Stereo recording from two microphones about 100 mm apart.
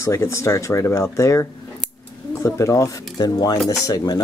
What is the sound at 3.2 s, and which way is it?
Speech, 40° left (ahead or behind).